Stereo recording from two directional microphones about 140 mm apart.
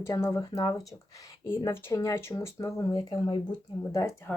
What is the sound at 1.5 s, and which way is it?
Speech, 20° left (ahead or behind).